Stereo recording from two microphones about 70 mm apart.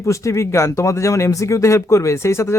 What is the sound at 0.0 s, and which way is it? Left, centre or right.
Speech, left.